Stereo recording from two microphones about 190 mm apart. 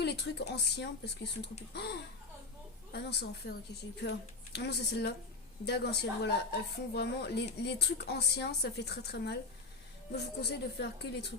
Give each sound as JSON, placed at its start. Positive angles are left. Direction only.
{"t": 0.0, "sound": "a woman's voice", "side_deg": 60}
{"t": 4.5, "sound": "a woman's voice", "side_deg": 60}